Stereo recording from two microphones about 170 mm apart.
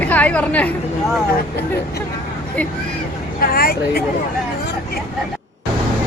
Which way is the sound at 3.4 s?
60° left (ahead or behind).